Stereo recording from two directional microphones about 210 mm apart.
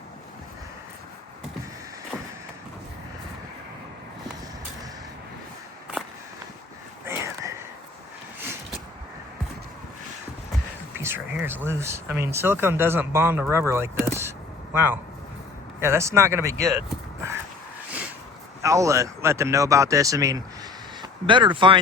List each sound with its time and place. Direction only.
7.0 s a sound: 10° right (ahead or behind)
10.9 s speech: 10° right (ahead or behind)
18.6 s speech: 15° right (ahead or behind)